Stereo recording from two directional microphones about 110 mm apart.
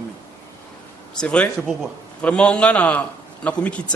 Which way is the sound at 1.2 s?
10° left (ahead or behind).